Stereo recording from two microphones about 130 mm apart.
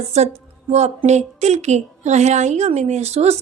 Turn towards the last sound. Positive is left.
turn(degrees=-55)  # may be behind; listen again after turning